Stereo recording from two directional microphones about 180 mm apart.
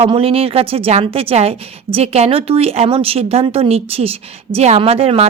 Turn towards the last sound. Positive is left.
turn(degrees=-35)  # may be behind; listen again after turning